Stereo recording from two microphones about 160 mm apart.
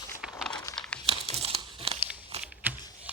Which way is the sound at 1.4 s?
35° right (ahead or behind).